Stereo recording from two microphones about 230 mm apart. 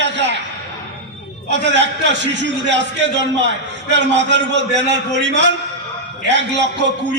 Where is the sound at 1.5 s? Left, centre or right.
Right.